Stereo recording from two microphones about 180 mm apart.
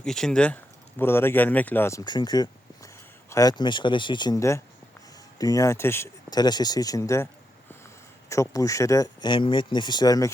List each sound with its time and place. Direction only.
0.0 s speech: 5° left (ahead or behind)
8.3 s speech: 15° left (ahead or behind)